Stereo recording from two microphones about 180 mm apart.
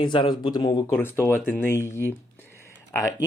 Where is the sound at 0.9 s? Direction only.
10° left (ahead or behind).